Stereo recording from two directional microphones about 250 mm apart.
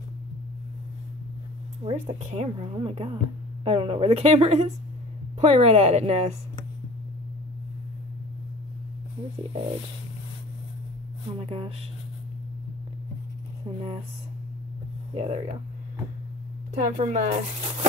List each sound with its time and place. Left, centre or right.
1.9 s a woman's voice: right
11.3 s a woman's voice: right
15.1 s a woman's voice: right
16.7 s a woman's voice: right